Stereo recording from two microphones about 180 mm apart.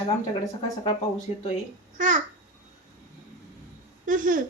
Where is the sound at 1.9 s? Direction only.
45° right (ahead or behind).